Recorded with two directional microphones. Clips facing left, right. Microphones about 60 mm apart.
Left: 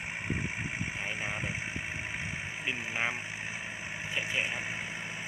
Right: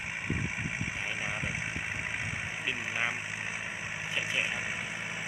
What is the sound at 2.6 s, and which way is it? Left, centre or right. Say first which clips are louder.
Speech: even; centre.